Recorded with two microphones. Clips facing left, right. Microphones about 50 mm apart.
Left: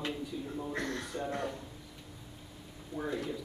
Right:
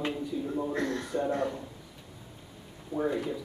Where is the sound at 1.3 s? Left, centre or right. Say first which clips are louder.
Right 6 dB; centre.